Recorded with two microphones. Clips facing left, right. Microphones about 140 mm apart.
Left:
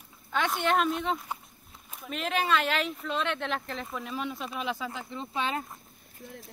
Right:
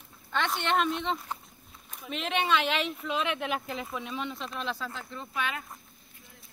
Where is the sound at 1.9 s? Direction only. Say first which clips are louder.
Even; centre (ahead or behind); by 5.6 s 30° left (ahead or behind).